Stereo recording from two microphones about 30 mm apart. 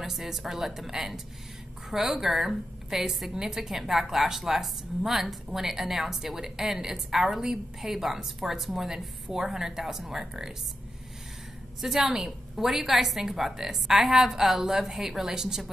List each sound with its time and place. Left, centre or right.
0.1 s a woman's voice: centre
8.8 s a woman's voice: centre
11.8 s a woman's voice: centre